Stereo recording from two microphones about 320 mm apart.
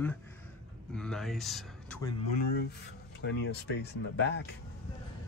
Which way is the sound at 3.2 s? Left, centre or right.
Left.